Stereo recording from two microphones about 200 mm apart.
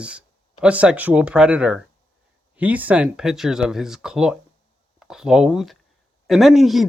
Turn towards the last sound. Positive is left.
turn(degrees=0)  # may be behind; listen again after turning